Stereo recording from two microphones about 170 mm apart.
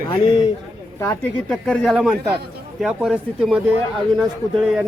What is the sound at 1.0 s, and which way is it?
Speech, 15° left (ahead or behind).